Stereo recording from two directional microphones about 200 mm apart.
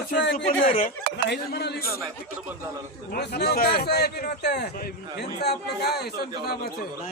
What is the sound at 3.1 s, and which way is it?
Speech, 55° left (ahead or behind).